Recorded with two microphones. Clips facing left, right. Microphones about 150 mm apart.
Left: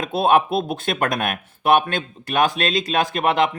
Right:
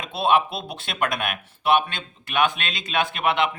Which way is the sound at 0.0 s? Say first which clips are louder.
Left 4 dB; 50° left (ahead or behind).